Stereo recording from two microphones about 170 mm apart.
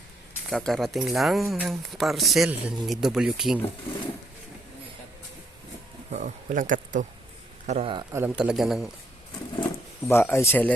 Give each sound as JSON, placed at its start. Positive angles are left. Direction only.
{"t": 0.5, "sound": "speech", "side_deg": 0}
{"t": 6.1, "sound": "speech", "side_deg": -45}
{"t": 8.1, "sound": "speech", "side_deg": -10}
{"t": 10.1, "sound": "speech", "side_deg": 15}